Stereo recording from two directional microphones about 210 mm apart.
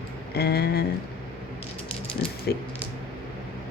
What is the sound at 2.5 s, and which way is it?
Speech, 50° left (ahead or behind).